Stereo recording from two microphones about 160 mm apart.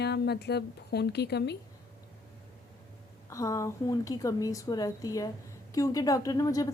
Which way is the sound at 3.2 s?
20° left (ahead or behind).